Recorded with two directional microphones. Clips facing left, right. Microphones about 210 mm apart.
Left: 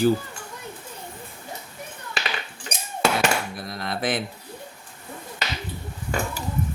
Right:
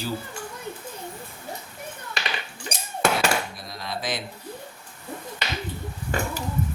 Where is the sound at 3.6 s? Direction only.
55° left (ahead or behind).